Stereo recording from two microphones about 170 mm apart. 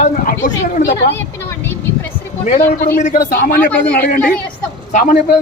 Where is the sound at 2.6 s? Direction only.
60° left (ahead or behind).